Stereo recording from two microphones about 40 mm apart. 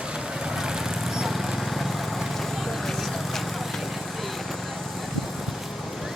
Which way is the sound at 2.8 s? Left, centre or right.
Centre.